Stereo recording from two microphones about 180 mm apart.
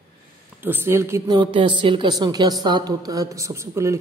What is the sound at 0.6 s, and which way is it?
Speech, 10° right (ahead or behind).